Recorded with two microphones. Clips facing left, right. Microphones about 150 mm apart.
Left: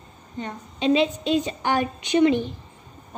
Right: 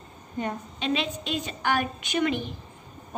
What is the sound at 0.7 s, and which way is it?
A woman's voice, 25° left (ahead or behind).